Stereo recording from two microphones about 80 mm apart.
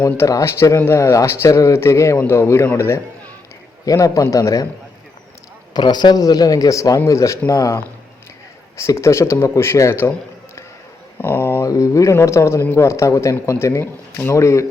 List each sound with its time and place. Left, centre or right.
0.4 s a man's voice: left
3.8 s a man's voice: left
5.7 s a man's voice: left
11.6 s a man's voice: left